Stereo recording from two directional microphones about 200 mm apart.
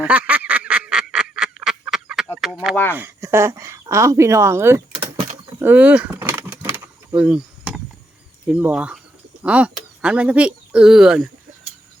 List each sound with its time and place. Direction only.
0.0 s a sound: 5° right (ahead or behind)
2.9 s speech: 10° right (ahead or behind)
4.9 s door: 30° right (ahead or behind)
5.5 s vehicle: 10° right (ahead or behind)
8.4 s speech: 5° right (ahead or behind)